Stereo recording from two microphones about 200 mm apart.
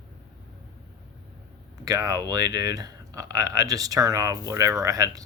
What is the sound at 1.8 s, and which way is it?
Speech, 15° right (ahead or behind).